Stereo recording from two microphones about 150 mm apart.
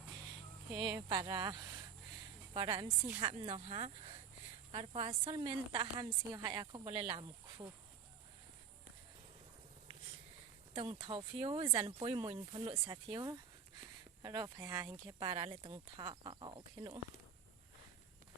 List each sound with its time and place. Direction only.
0.7 s speech: 30° right (ahead or behind)
2.5 s a woman's voice: 40° right (ahead or behind)
11.0 s speech: 35° right (ahead or behind)
15.2 s speech: 35° right (ahead or behind)